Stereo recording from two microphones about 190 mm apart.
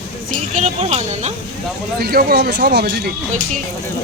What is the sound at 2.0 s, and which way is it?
Speech, 55° right (ahead or behind).